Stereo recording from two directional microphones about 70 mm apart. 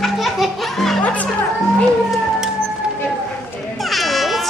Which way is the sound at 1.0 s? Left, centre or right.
Centre.